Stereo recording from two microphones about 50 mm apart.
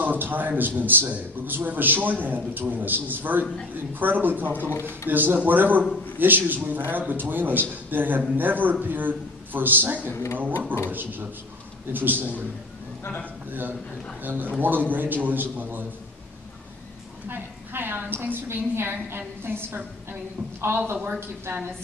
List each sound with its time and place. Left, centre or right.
0.0 s a man's voice: right
13.5 s a man's voice: right
17.3 s a woman's voice: right